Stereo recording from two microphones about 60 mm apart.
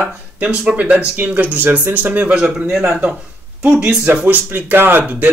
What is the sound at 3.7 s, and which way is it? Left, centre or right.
Speech, right.